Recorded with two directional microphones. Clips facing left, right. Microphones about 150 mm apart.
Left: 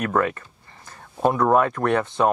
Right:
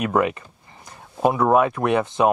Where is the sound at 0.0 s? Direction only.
15° right (ahead or behind).